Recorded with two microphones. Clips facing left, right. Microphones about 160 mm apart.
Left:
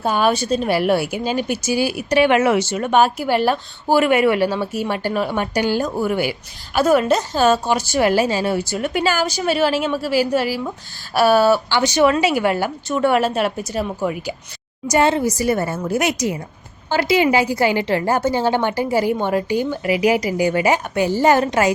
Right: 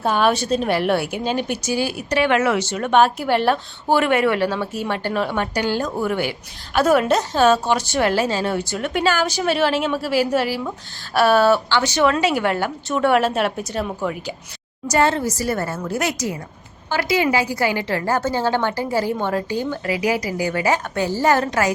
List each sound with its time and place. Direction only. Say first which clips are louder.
0.0 s a woman's voice: even; centre (ahead or behind)
11.8 s a woman's voice: left 2 dB; 15° left (ahead or behind)